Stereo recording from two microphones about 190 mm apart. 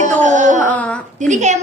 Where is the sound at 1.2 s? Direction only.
40° right (ahead or behind).